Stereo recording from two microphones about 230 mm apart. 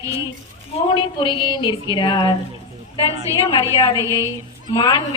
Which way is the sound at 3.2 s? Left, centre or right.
Centre.